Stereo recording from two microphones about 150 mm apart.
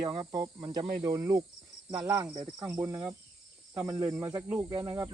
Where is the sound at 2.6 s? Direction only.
10° right (ahead or behind).